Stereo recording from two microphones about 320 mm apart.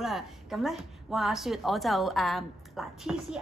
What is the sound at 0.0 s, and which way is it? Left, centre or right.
A woman's voice, centre.